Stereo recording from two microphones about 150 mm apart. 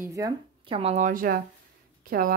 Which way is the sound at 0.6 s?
40° right (ahead or behind).